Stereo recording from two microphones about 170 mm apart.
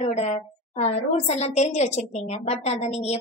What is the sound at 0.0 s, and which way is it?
A woman's voice, 40° left (ahead or behind).